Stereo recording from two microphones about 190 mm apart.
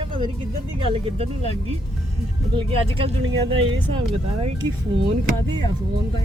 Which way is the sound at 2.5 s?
30° right (ahead or behind).